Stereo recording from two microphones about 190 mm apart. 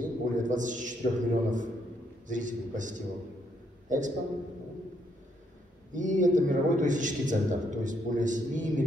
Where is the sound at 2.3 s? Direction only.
40° right (ahead or behind).